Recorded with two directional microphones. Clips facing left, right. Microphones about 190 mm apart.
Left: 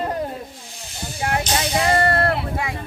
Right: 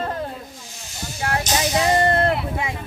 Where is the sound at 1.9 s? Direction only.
20° right (ahead or behind).